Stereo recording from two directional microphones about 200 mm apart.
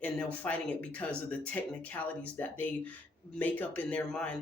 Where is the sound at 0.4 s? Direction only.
5° left (ahead or behind).